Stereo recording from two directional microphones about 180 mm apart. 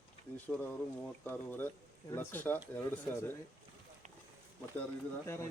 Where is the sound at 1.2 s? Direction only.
10° left (ahead or behind).